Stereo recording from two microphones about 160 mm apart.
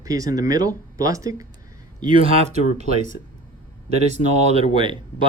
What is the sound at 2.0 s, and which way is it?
Speech, 35° right (ahead or behind).